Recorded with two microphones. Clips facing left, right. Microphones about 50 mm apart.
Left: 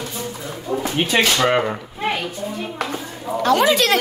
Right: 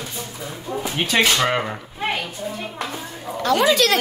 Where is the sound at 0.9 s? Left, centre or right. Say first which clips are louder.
Left 1 dB; centre.